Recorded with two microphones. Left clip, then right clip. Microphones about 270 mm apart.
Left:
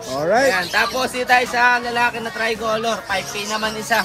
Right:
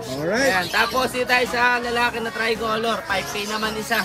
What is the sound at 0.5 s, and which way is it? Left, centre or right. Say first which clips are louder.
Speech: left 2 dB; centre.